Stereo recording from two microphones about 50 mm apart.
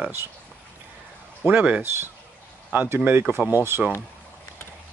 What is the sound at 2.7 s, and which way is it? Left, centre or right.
Speech, right.